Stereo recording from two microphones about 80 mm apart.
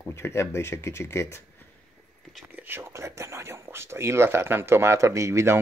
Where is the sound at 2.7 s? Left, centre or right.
Right.